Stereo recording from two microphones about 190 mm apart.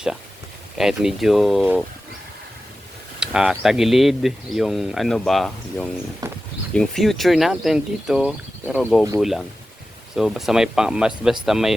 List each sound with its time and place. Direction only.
0.8 s speech: centre (ahead or behind)
3.2 s speech: 5° right (ahead or behind)
6.2 s a sound: 20° right (ahead or behind)
6.7 s speech: centre (ahead or behind)
10.2 s speech: centre (ahead or behind)